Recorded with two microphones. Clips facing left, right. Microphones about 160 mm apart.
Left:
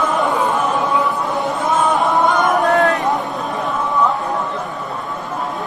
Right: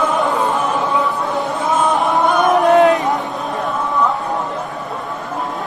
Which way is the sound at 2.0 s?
20° right (ahead or behind).